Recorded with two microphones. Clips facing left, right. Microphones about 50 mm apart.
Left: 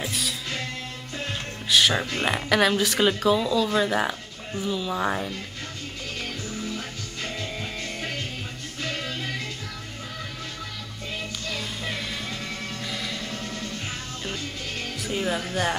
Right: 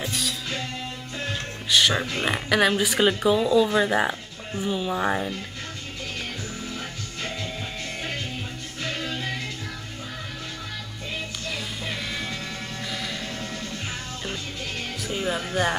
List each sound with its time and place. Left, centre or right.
0.0 s music: centre
1.7 s speech: centre
4.6 s speech: right
4.9 s speech: centre
11.4 s music: centre
15.0 s speech: centre